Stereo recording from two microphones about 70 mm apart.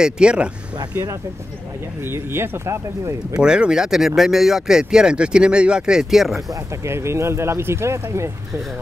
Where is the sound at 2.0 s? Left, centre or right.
Right.